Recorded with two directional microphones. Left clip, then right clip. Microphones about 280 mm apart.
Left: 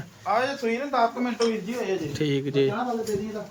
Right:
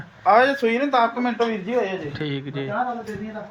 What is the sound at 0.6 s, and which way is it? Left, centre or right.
Speech, right.